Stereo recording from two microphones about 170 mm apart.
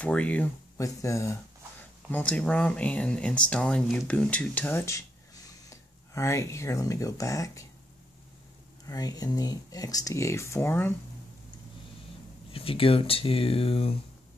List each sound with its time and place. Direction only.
0.0 s speech: 10° left (ahead or behind)
8.8 s speech: 20° left (ahead or behind)
12.5 s speech: 35° left (ahead or behind)